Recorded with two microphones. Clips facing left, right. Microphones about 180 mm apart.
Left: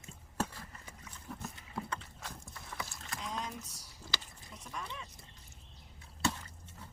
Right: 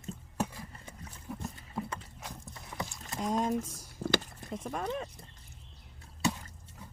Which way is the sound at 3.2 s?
45° right (ahead or behind).